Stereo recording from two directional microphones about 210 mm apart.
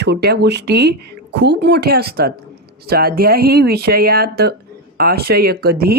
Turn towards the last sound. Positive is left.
turn(degrees=-50)  # may be behind; listen again after turning